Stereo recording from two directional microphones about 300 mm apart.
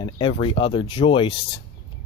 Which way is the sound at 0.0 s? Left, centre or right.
Centre.